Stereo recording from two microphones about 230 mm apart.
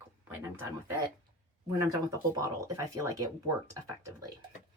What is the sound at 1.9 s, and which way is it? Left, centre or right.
Speech, centre.